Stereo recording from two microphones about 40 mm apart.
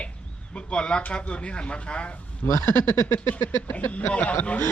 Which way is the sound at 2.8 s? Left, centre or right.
Left.